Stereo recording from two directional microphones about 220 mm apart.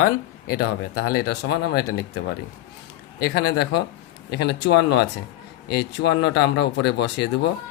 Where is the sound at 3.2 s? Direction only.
50° left (ahead or behind).